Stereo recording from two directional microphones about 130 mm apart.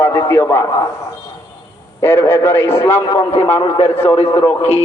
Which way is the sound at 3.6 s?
50° left (ahead or behind).